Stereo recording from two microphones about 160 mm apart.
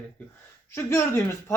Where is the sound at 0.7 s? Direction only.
15° left (ahead or behind).